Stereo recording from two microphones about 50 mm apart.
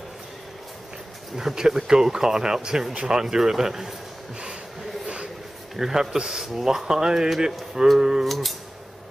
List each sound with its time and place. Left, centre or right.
1.3 s speech: centre
5.0 s a sound: centre
5.8 s speech: centre
8.3 s speech: centre